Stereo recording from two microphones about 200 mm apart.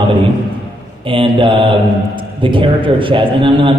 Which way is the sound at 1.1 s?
25° right (ahead or behind).